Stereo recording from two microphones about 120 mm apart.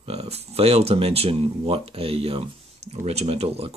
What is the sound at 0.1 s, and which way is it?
Speech, 55° right (ahead or behind).